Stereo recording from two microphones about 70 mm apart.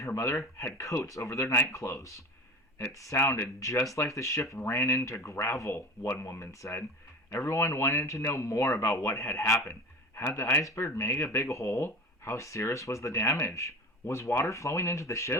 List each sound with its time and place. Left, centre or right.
0.0 s speech: left